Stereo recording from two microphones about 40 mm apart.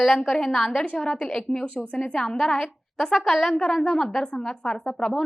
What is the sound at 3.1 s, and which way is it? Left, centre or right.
Speech, centre.